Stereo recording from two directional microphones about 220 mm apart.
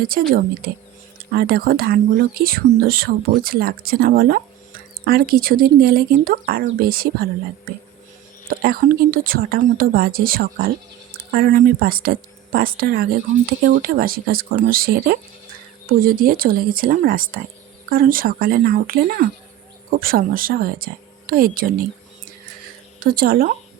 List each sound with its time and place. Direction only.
0.1 s speech: 40° right (ahead or behind)
8.4 s speech: 40° right (ahead or behind)
13.3 s speech: 60° right (ahead or behind)
13.7 s speech: 40° right (ahead or behind)
23.0 s speech: 40° right (ahead or behind)